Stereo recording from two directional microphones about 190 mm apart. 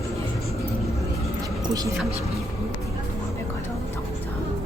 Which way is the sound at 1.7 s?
20° right (ahead or behind).